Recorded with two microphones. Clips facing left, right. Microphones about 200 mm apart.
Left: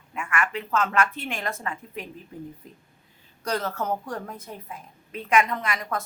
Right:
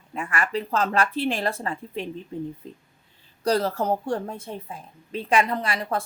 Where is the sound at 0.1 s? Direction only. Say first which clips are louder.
Right 2 dB; 35° right (ahead or behind).